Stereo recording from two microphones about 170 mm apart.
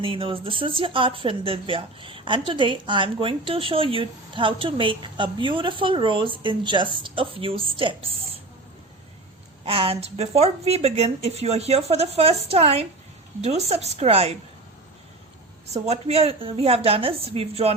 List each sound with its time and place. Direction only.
0.0 s speech: 30° right (ahead or behind)
9.6 s speech: 35° right (ahead or behind)
15.6 s speech: 40° right (ahead or behind)